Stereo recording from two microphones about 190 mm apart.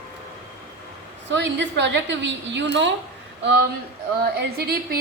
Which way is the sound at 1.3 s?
70° right (ahead or behind).